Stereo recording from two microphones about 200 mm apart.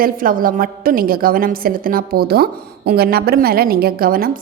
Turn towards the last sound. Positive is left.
turn(degrees=-45)  # may be behind; listen again after turning